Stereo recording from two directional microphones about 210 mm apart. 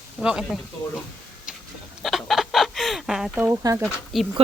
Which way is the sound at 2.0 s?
Centre (ahead or behind).